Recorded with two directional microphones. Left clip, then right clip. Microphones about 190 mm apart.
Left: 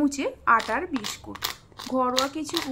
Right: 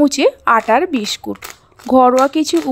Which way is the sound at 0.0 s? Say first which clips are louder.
Right 12 dB; 40° right (ahead or behind).